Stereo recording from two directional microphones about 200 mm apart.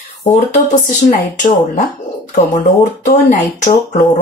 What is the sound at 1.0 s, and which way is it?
Speech, 40° left (ahead or behind).